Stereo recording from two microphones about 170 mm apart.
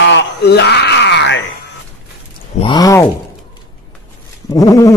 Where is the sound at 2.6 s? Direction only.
30° left (ahead or behind).